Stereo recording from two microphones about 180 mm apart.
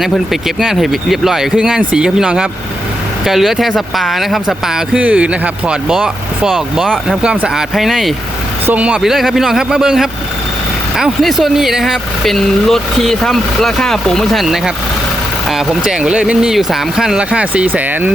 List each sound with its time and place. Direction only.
0.0 s speech: centre (ahead or behind)